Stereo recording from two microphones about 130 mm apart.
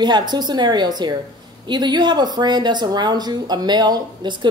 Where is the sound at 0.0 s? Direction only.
35° right (ahead or behind).